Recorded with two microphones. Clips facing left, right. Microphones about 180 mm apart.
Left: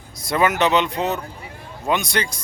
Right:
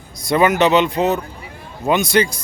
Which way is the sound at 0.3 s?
Centre (ahead or behind).